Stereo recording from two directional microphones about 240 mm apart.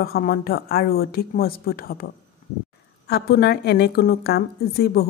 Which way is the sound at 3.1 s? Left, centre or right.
Left.